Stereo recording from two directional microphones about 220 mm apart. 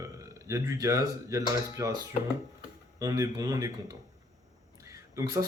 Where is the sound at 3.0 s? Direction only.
15° right (ahead or behind).